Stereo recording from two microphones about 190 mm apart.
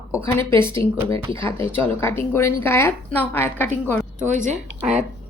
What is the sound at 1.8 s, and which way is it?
A woman's voice, 10° left (ahead or behind).